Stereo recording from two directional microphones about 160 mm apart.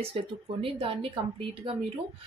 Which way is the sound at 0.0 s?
35° right (ahead or behind).